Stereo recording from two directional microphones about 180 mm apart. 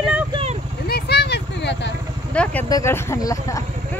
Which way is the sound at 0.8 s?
65° left (ahead or behind).